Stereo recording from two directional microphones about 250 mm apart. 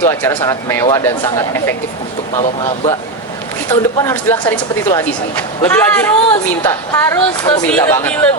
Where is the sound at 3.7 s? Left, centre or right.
Centre.